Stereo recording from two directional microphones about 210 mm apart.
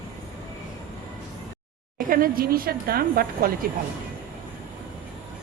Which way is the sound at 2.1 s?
45° right (ahead or behind).